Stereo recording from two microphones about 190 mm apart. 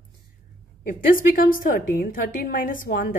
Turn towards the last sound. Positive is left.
turn(degrees=45)  # may be behind; listen again after turning